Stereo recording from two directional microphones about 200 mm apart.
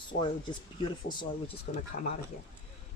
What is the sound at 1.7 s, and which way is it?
Speech, 40° left (ahead or behind).